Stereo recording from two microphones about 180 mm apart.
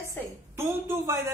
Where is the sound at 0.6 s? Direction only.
15° right (ahead or behind).